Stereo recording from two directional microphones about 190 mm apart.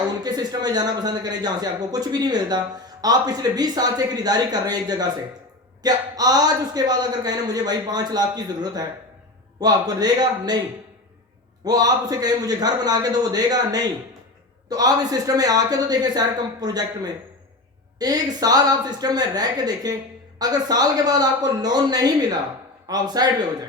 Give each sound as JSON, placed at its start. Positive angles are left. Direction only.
{"t": 0.2, "sound": "a man's voice", "side_deg": -20}
{"t": 11.6, "sound": "a man's voice", "side_deg": -20}